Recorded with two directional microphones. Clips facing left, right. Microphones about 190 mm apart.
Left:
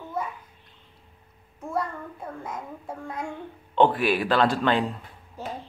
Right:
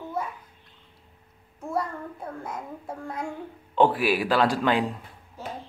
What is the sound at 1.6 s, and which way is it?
Speech, 5° right (ahead or behind).